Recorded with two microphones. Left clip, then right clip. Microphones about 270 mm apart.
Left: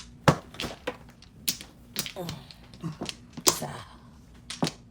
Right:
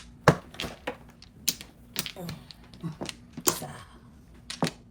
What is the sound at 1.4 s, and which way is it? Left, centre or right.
Typing, centre.